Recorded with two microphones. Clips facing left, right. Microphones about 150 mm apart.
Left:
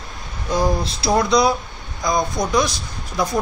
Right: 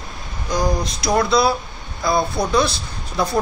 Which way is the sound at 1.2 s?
20° left (ahead or behind).